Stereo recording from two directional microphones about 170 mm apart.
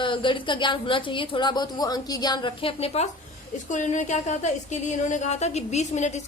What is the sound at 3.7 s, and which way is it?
A woman's voice, 45° left (ahead or behind).